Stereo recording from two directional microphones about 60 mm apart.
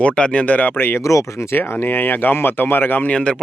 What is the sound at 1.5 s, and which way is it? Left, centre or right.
Speech, left.